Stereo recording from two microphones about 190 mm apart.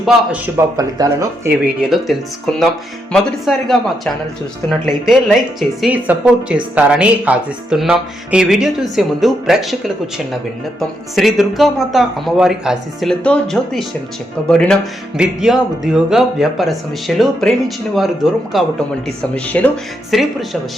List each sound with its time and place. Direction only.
0.5 s speech: 20° right (ahead or behind)
1.8 s speech: centre (ahead or behind)